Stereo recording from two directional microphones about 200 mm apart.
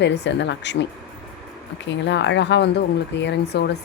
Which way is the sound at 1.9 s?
65° left (ahead or behind).